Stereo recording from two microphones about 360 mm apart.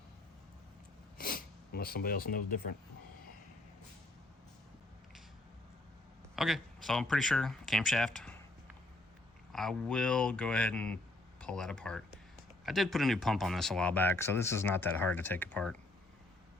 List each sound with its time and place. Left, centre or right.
1.2 s speech: left
6.3 s speech: centre
9.5 s speech: centre